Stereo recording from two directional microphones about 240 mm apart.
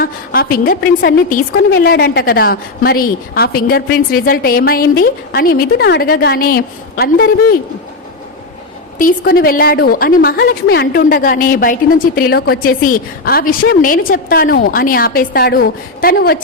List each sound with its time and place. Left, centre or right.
0.0 s a woman's voice: left
9.0 s a woman's voice: left